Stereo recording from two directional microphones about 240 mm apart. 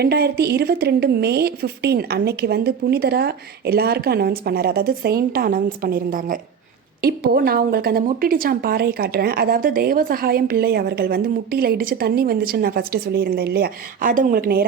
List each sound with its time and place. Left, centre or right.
0.0 s a woman's voice: right